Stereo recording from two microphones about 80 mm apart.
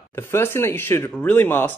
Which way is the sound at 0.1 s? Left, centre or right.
Left.